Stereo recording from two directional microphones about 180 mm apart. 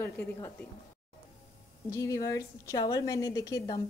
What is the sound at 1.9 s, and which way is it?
A woman's voice, 15° left (ahead or behind).